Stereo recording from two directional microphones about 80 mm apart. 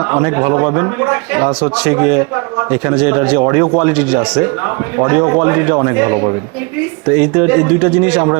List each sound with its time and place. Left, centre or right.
0.1 s a man's voice: right